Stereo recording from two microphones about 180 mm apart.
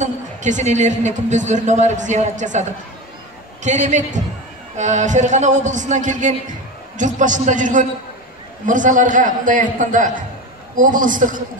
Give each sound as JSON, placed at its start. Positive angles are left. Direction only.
{"t": 0.0, "sound": "a woman's voice", "side_deg": -40}
{"t": 3.6, "sound": "a woman's voice", "side_deg": -40}